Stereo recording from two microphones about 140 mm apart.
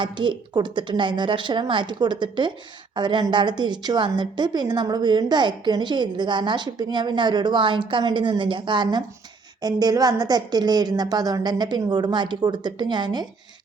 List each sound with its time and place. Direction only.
0.0 s a woman's voice: 35° right (ahead or behind)